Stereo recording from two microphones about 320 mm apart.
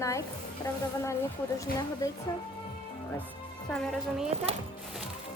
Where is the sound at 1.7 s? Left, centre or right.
Left.